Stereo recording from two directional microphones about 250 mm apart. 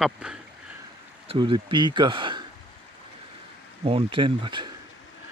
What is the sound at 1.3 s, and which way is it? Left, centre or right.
Speech, centre.